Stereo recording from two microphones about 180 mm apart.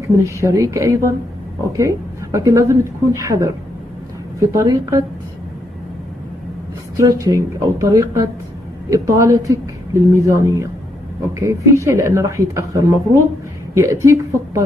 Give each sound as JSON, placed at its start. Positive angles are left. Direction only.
{"t": 0.0, "sound": "a woman's voice", "side_deg": -15}
{"t": 7.0, "sound": "a woman's voice", "side_deg": -20}